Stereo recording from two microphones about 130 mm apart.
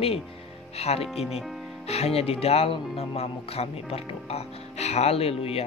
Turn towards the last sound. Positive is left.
turn(degrees=50)  # may be behind; listen again after turning